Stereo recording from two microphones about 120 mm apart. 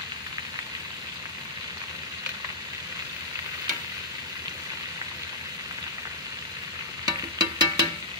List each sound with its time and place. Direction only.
7.1 s music: 35° right (ahead or behind)